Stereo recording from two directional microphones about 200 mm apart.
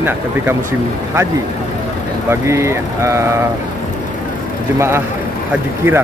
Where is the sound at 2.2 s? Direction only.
15° right (ahead or behind).